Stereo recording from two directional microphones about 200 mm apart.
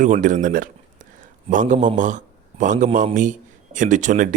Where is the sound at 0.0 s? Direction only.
40° right (ahead or behind).